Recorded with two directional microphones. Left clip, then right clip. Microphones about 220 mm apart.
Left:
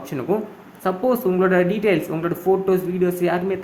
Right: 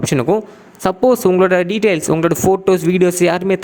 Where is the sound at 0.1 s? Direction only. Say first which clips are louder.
Right 7 dB; 45° right (ahead or behind).